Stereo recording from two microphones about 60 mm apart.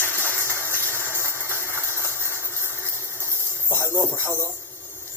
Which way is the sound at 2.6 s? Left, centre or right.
Right.